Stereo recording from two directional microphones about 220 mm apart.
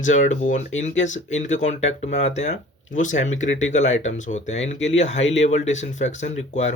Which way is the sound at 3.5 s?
30° left (ahead or behind).